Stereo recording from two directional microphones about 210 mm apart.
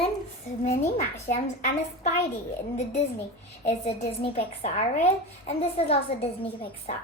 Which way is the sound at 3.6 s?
30° left (ahead or behind).